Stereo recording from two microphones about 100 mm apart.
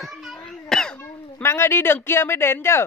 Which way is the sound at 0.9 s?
20° left (ahead or behind).